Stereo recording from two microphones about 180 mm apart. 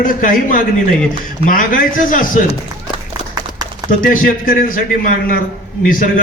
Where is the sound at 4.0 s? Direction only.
50° left (ahead or behind).